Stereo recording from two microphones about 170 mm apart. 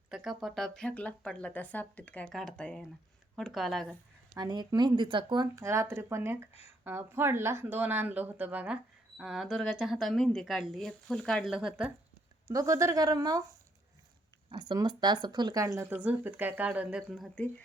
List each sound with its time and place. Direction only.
0.1 s speech: centre (ahead or behind)
4.4 s speech: 20° right (ahead or behind)
6.5 s speech: 35° left (ahead or behind)
6.8 s speech: 15° right (ahead or behind)
12.5 s speech: 20° right (ahead or behind)
14.5 s speech: 25° right (ahead or behind); by 17.2 s 5° right (ahead or behind)